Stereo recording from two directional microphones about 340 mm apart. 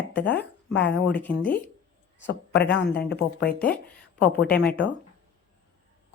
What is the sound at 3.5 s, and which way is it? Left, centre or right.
Speech, centre.